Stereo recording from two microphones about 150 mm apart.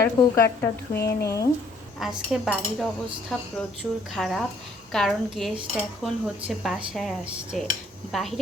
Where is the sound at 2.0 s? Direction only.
Centre (ahead or behind).